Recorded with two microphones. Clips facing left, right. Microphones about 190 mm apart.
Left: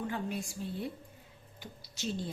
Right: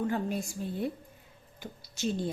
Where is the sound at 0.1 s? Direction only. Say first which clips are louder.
Right 5 dB; 40° right (ahead or behind).